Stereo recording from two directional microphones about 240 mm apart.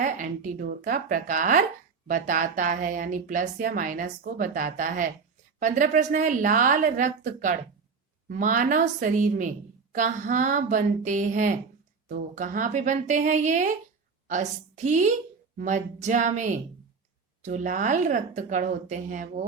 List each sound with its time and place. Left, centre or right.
0.0 s a woman's voice: right